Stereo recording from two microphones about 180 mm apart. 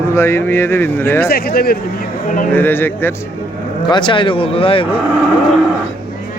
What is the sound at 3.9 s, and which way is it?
Speech, 25° left (ahead or behind).